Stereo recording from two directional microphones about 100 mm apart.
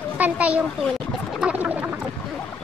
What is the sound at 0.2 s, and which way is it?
A child's voice, 15° right (ahead or behind).